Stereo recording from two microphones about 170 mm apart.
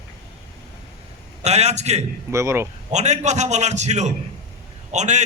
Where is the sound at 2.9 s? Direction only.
45° right (ahead or behind).